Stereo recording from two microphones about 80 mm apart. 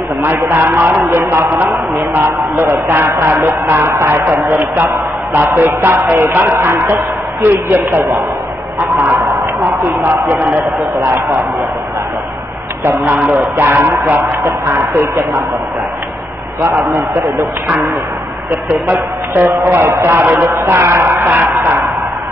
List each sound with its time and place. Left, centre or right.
0.2 s a man's voice: right
13.0 s a man's voice: centre; by 15.0 s right
16.6 s speech: right
18.7 s speech: right